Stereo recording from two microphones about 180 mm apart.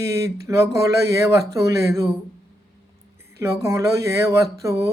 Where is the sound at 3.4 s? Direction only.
15° right (ahead or behind).